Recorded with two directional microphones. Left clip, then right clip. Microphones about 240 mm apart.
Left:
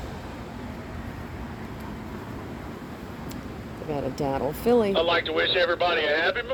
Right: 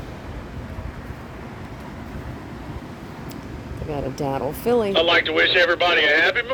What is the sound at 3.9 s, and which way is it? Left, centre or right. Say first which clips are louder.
Speech: right 2 dB; centre.